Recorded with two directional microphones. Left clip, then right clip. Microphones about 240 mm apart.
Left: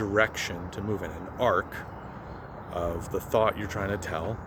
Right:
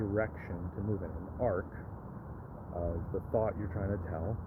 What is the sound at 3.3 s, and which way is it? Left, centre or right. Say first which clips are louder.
Speech: left 9 dB; centre.